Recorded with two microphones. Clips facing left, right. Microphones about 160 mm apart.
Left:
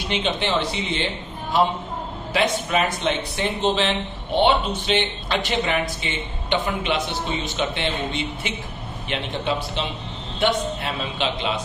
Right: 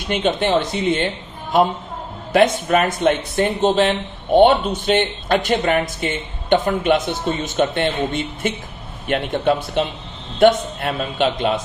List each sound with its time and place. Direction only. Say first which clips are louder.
0.1 s speech: right 6 dB; 50° right (ahead or behind)